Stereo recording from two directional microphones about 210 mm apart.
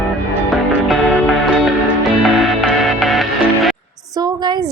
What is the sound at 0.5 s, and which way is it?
Music, centre (ahead or behind).